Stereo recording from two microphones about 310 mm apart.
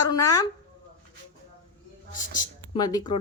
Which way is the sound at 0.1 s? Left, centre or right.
Centre.